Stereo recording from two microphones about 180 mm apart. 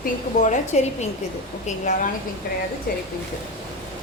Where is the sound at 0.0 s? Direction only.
45° left (ahead or behind).